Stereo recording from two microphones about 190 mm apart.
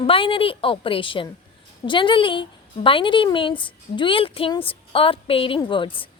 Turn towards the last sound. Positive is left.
turn(degrees=25)  # may be behind; listen again after turning